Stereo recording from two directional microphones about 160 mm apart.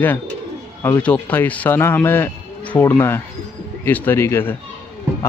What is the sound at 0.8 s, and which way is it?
Speech, 15° left (ahead or behind).